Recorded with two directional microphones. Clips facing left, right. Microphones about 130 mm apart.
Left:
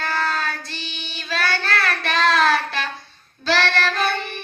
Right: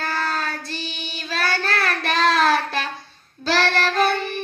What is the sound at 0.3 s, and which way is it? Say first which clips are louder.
Child singing: left 1 dB; 40° right (ahead or behind).